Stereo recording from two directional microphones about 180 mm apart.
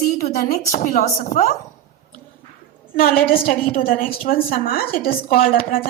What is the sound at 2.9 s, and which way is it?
A woman's voice, 55° left (ahead or behind).